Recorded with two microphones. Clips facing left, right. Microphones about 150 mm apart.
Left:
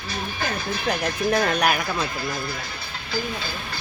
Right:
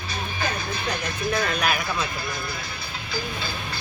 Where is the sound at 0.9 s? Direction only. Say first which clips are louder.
Left 5 dB; 90° left.